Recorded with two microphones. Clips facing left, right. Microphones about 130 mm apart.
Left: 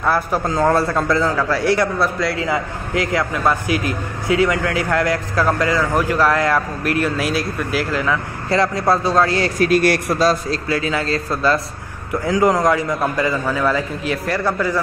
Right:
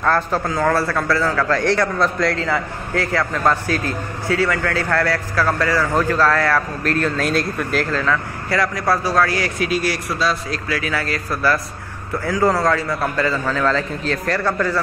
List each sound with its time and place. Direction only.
0.0 s a man's voice: 10° left (ahead or behind)
0.6 s a man's voice: 20° left (ahead or behind)
9.6 s speech: 55° left (ahead or behind)
10.5 s a man's voice: 25° left (ahead or behind)